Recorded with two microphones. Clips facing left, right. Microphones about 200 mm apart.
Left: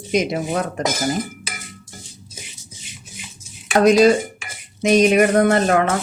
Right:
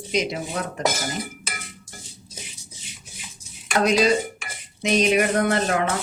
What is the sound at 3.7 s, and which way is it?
Speech, 45° left (ahead or behind).